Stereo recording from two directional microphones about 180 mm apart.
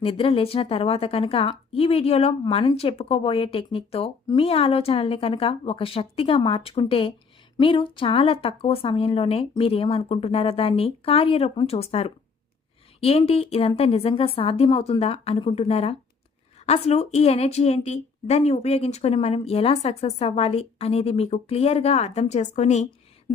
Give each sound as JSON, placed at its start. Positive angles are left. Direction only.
{"t": 0.0, "sound": "a woman's voice", "side_deg": 30}